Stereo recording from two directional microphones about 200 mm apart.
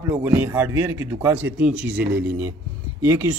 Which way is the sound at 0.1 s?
10° right (ahead or behind).